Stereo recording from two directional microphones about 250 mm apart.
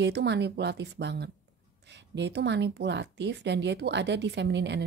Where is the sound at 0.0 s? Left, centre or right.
Right.